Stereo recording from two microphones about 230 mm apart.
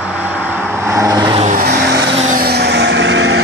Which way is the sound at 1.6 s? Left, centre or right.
Right.